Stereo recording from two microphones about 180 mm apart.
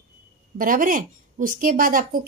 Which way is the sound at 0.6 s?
50° right (ahead or behind).